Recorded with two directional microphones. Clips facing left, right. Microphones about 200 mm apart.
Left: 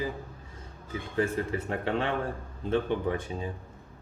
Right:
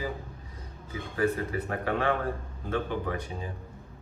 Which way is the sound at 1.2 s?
25° left (ahead or behind).